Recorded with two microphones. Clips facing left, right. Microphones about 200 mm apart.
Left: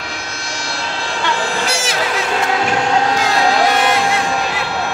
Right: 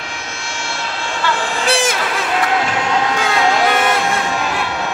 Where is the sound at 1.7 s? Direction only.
55° right (ahead or behind).